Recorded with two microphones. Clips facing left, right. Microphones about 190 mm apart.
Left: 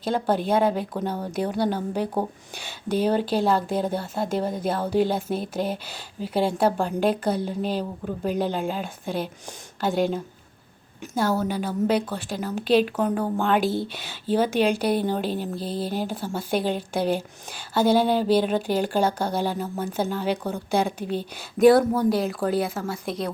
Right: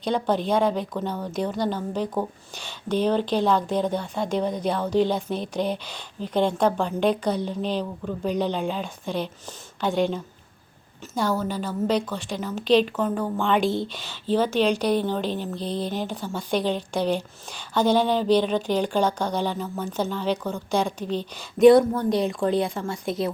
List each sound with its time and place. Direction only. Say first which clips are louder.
0.0 s a woman's voice: even; 5° left (ahead or behind)